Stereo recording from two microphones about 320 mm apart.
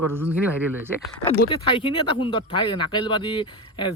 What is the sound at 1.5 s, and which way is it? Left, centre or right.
Speech, centre.